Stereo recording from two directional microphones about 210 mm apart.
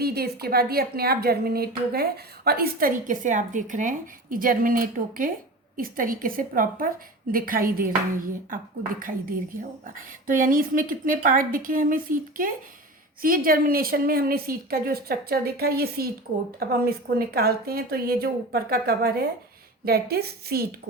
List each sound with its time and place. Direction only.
0.0 s a woman's voice: 50° right (ahead or behind)
9.6 s a woman's voice: 40° right (ahead or behind)